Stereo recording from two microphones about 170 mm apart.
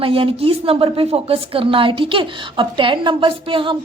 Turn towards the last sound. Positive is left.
turn(degrees=-30)  # may be behind; listen again after turning